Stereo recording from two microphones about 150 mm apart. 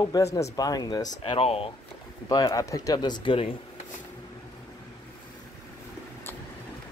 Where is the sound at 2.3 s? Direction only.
25° left (ahead or behind).